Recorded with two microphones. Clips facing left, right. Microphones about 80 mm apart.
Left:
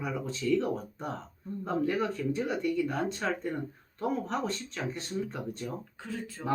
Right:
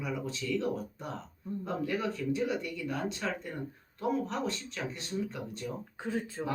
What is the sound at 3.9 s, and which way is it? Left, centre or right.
Speech, left.